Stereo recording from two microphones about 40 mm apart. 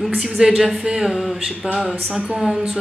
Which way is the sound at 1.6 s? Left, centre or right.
Right.